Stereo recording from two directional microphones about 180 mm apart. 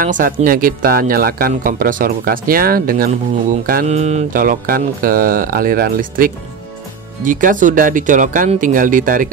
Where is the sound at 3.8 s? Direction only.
40° right (ahead or behind).